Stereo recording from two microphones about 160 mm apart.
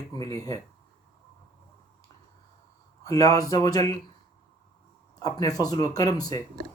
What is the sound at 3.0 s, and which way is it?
Speech, 20° left (ahead or behind).